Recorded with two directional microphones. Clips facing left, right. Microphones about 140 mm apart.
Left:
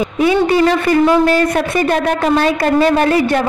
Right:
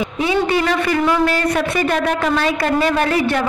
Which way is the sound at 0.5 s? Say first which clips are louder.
Left 5 dB; 35° left (ahead or behind).